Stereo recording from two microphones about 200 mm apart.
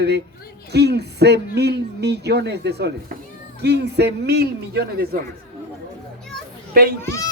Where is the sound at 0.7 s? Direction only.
55° right (ahead or behind).